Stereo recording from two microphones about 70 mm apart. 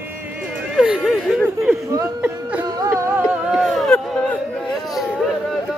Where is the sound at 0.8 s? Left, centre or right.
Centre.